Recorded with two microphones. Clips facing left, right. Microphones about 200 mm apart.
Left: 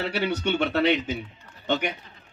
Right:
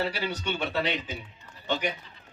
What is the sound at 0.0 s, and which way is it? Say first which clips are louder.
A man's voice: left 4 dB; 60° left (ahead or behind).